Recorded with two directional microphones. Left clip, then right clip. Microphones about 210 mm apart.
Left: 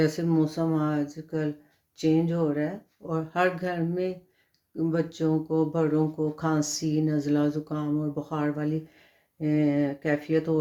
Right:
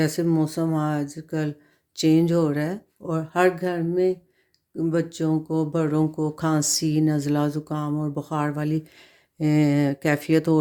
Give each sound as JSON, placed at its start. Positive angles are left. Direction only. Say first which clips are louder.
{"t": 0.0, "sound": "speech", "louder": "right 2 dB", "side_deg": -35}
{"t": 2.0, "sound": "speech", "louder": "right 5 dB", "side_deg": -55}